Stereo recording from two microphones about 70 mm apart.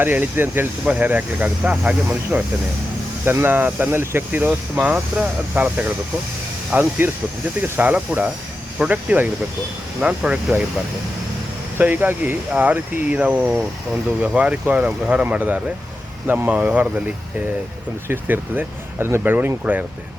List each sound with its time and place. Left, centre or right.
0.0 s speech: right
3.2 s speech: right
11.8 s speech: right
18.1 s speech: right